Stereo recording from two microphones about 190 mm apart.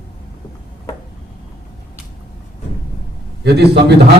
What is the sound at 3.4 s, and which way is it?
Speech, 60° right (ahead or behind).